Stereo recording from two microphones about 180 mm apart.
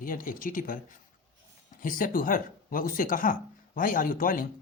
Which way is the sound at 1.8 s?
50° left (ahead or behind).